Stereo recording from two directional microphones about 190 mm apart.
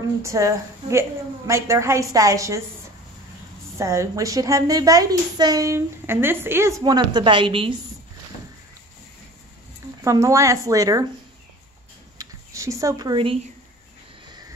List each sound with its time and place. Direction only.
0.2 s a woman's voice: 15° right (ahead or behind)
3.7 s a woman's voice: 15° right (ahead or behind)
10.0 s a woman's voice: 15° right (ahead or behind)
12.2 s speech: 15° right (ahead or behind)